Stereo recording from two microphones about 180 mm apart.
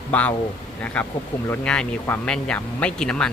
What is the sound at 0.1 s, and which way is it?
Speech, 10° left (ahead or behind).